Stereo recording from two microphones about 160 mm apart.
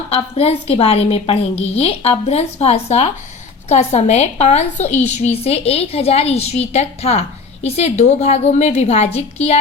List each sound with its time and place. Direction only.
0.1 s a woman's voice: 40° left (ahead or behind)